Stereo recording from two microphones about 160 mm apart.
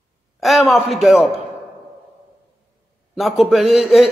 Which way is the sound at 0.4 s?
Centre (ahead or behind).